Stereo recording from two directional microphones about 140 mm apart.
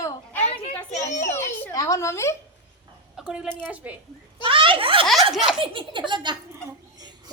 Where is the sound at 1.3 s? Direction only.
20° left (ahead or behind).